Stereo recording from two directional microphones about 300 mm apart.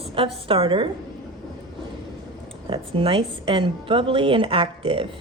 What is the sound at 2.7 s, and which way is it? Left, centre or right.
A woman's voice, centre.